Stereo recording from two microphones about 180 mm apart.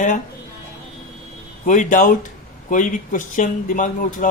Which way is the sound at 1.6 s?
45° left (ahead or behind).